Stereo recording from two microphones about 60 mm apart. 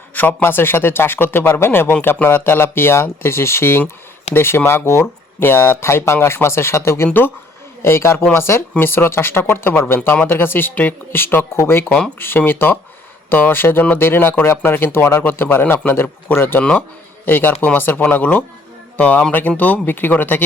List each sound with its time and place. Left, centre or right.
0.1 s a man's voice: left
12.5 s speech: left